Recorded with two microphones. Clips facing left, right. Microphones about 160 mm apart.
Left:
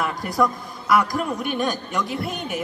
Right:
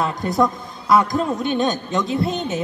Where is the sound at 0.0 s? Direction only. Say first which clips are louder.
Right 3 dB; 25° right (ahead or behind).